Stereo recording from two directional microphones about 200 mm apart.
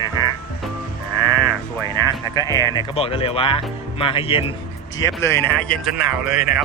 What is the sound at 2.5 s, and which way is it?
Speech, 15° left (ahead or behind).